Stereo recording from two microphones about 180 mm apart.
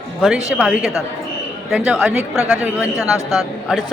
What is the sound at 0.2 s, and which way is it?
Speech, centre (ahead or behind).